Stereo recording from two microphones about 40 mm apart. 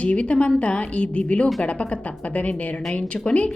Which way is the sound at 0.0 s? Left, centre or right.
Left.